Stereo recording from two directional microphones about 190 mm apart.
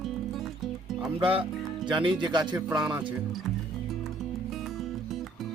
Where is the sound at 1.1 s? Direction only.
30° right (ahead or behind).